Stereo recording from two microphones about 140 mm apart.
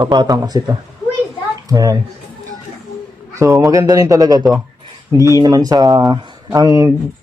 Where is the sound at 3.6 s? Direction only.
25° right (ahead or behind).